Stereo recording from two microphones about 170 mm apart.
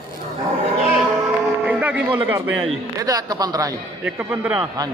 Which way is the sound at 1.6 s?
10° right (ahead or behind).